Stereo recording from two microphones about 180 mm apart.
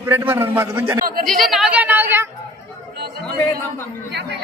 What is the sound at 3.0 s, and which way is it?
Speech, 60° right (ahead or behind).